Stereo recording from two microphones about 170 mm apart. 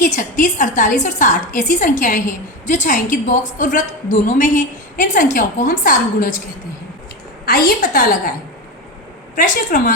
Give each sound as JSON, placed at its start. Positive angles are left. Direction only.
{"t": 0.0, "sound": "a woman's voice", "side_deg": 50}
{"t": 7.4, "sound": "a woman's voice", "side_deg": 60}
{"t": 9.3, "sound": "a woman's voice", "side_deg": 50}